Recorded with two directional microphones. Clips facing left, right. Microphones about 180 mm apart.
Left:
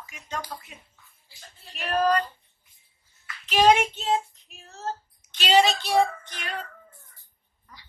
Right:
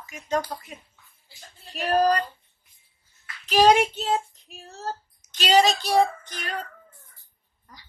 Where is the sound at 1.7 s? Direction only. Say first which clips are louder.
Right 3 dB; 35° right (ahead or behind).